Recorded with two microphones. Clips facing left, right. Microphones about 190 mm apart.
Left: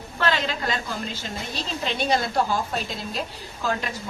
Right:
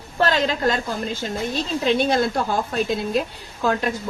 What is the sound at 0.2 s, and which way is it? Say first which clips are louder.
A woman's voice: right 5 dB; 40° right (ahead or behind).